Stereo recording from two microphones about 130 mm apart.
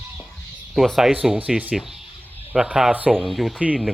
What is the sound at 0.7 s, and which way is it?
Speech, centre (ahead or behind).